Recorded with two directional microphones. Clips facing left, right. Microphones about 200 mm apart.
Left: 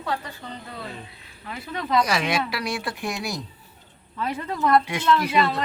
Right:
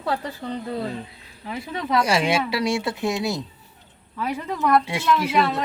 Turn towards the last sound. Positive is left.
turn(degrees=-5)  # may be behind; listen again after turning